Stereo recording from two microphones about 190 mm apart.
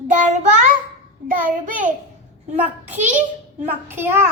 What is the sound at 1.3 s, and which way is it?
Child singing, 45° right (ahead or behind).